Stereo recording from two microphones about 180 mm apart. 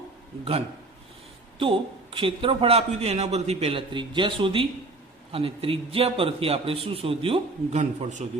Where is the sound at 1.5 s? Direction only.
30° right (ahead or behind).